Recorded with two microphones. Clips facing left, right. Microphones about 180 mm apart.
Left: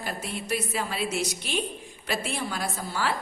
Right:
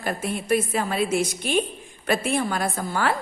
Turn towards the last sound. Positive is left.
turn(degrees=-55)  # may be behind; listen again after turning